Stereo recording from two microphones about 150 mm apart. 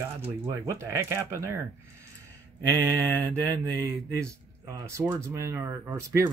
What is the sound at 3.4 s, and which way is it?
A man's voice, 25° right (ahead or behind).